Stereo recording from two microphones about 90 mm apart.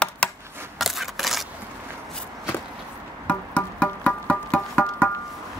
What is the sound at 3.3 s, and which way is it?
Music, 15° left (ahead or behind).